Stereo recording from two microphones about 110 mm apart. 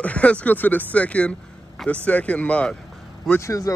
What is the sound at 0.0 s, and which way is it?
Speech, 10° left (ahead or behind).